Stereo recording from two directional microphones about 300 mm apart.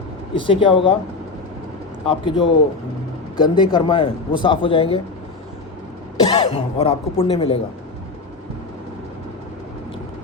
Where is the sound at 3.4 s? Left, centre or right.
Centre.